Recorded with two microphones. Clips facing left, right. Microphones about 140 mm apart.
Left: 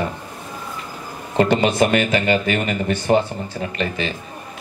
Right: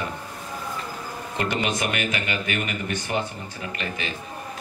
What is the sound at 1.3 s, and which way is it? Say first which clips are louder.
Speech: left 10 dB; 30° left (ahead or behind).